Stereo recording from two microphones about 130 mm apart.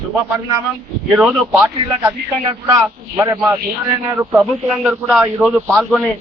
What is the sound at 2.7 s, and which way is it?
Speech, 25° right (ahead or behind).